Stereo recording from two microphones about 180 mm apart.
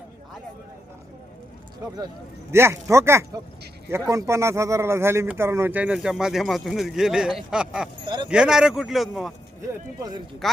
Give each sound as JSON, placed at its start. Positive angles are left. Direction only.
{"t": 2.5, "sound": "speech", "side_deg": -15}
{"t": 8.0, "sound": "speech", "side_deg": -25}
{"t": 8.3, "sound": "speech", "side_deg": -5}
{"t": 9.6, "sound": "speech", "side_deg": -20}